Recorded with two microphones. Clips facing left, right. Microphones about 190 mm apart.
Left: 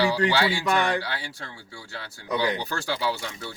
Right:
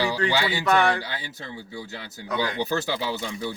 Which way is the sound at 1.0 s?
20° right (ahead or behind).